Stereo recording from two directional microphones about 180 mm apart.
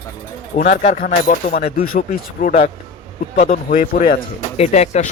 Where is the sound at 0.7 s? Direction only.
45° left (ahead or behind).